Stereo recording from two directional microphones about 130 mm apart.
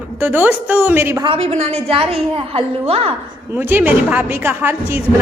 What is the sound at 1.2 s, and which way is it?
A woman's voice, 50° right (ahead or behind).